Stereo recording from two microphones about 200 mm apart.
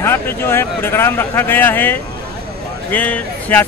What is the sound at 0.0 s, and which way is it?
Speech, 10° left (ahead or behind).